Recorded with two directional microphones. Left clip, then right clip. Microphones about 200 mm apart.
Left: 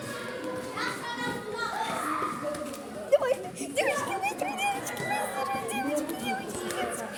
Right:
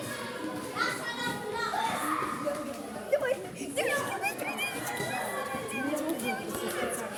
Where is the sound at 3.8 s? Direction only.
10° left (ahead or behind).